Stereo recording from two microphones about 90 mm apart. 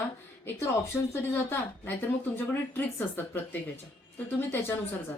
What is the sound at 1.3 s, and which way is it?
A woman's voice, 25° left (ahead or behind).